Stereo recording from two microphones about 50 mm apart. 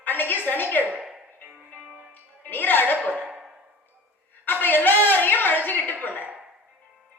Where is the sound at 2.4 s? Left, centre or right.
Left.